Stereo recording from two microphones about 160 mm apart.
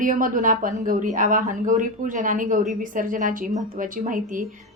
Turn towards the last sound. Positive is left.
turn(degrees=-55)  # may be behind; listen again after turning